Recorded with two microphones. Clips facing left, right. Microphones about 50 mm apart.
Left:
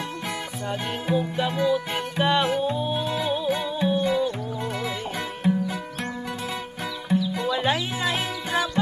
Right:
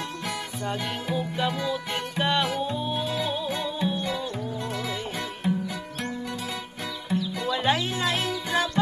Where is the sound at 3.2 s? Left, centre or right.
Centre.